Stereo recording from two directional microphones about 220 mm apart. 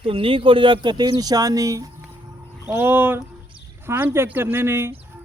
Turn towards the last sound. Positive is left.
turn(degrees=-10)  # may be behind; listen again after turning